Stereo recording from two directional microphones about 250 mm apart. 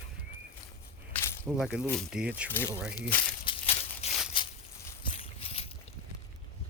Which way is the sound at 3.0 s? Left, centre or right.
Centre.